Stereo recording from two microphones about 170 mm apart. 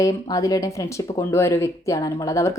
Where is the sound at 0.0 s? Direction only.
20° left (ahead or behind).